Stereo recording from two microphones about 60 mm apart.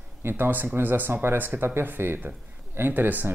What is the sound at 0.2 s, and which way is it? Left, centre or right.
Speech, right.